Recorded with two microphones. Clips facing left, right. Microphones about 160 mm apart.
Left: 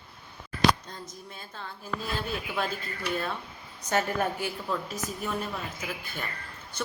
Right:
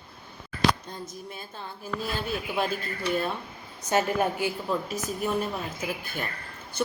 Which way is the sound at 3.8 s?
20° right (ahead or behind).